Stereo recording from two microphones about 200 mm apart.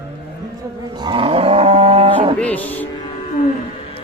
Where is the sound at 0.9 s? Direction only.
25° right (ahead or behind).